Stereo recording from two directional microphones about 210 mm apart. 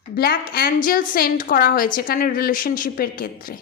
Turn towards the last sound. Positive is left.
turn(degrees=45)  # may be behind; listen again after turning